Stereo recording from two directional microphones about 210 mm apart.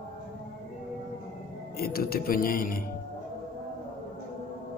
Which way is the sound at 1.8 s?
45° left (ahead or behind).